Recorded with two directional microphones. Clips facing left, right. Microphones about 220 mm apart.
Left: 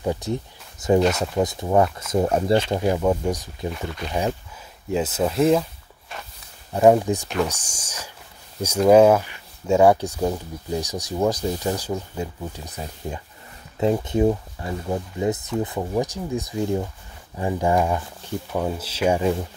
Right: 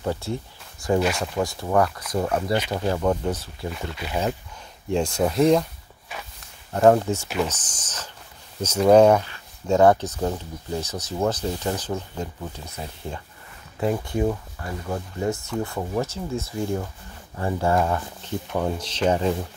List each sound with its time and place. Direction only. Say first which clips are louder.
0.0 s speech: left 2 dB; 15° left (ahead or behind)
2.7 s speech: left 2 dB; 15° left (ahead or behind)
3.7 s speech: even; 5° right (ahead or behind)
6.7 s speech: left 1 dB; 10° left (ahead or behind)